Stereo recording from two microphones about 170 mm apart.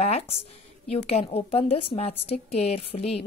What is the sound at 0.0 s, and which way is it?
Speech, 40° left (ahead or behind).